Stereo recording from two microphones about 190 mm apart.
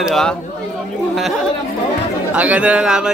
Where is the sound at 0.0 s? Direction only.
Centre (ahead or behind).